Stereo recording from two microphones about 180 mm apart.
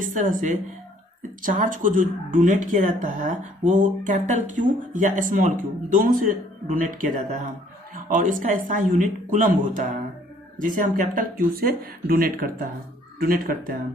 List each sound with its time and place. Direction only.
0.0 s speech: 45° right (ahead or behind)